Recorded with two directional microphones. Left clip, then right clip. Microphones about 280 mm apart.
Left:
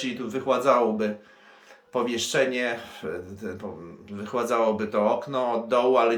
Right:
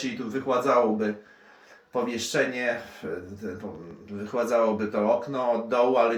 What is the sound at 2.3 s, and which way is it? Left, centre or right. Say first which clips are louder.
Speech: left 1 dB; centre.